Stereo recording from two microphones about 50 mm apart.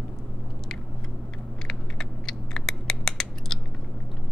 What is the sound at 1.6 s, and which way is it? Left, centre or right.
Scissors, centre.